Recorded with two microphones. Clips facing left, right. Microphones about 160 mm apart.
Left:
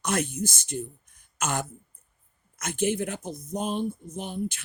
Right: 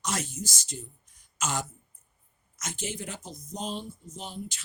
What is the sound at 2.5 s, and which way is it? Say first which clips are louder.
Speech: left 10 dB; 55° left (ahead or behind).